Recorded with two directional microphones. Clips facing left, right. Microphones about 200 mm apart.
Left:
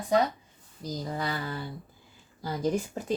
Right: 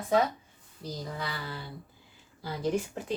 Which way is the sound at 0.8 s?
45° left (ahead or behind).